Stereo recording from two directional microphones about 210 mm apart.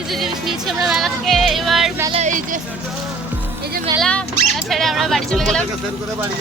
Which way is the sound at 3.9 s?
5° left (ahead or behind).